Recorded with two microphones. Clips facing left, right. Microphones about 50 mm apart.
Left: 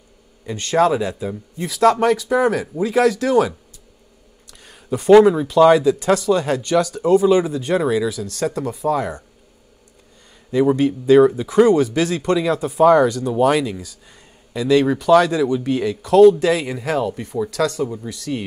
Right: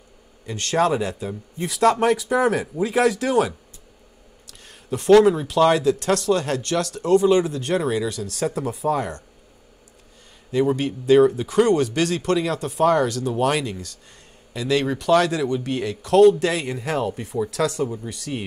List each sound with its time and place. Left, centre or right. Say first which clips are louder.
0.5 s speech: left 4 dB; centre
4.5 s a sound: left 4 dB; centre
5.2 s speech: left 4 dB; centre
10.5 s speech: left 5 dB; centre